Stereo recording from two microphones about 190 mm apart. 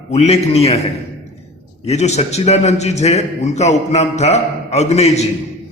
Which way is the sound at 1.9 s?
35° left (ahead or behind).